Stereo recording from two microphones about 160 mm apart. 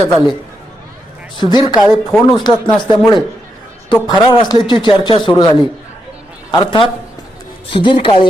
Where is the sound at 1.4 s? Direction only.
25° left (ahead or behind).